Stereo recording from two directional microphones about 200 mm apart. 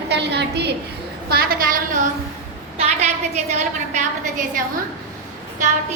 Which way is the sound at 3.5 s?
35° right (ahead or behind).